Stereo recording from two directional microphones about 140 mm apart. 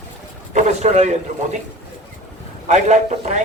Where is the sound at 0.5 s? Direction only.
55° right (ahead or behind).